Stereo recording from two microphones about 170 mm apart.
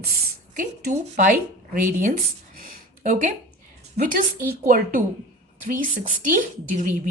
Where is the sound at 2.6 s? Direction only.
55° right (ahead or behind).